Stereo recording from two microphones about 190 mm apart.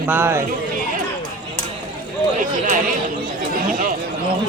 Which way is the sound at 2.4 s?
45° right (ahead or behind).